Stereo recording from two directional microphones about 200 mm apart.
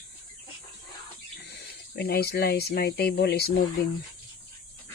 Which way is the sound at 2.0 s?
55° left (ahead or behind).